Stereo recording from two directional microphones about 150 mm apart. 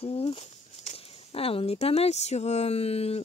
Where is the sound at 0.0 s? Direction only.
40° left (ahead or behind).